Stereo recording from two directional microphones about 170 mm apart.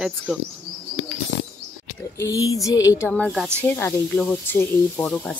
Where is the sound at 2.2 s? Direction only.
20° left (ahead or behind).